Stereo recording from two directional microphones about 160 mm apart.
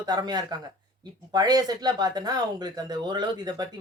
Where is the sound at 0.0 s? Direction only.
25° right (ahead or behind).